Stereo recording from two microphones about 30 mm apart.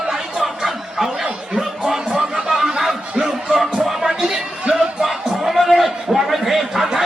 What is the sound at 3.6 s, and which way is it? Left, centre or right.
Music, centre.